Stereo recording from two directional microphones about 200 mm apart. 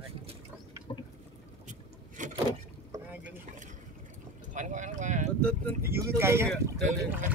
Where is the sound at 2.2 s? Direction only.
40° right (ahead or behind).